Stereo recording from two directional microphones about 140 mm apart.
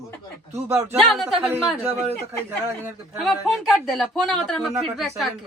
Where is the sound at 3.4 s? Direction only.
Centre (ahead or behind).